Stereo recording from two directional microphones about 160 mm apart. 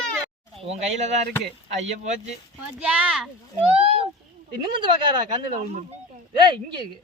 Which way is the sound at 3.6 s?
40° right (ahead or behind).